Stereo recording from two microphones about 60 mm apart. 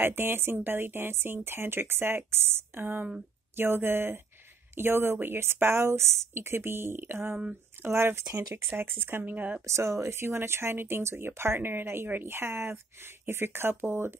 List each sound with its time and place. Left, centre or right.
0.0 s speech: right
9.7 s speech: right